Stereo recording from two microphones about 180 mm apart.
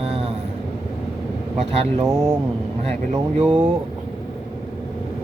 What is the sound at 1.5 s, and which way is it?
Speech, 35° right (ahead or behind).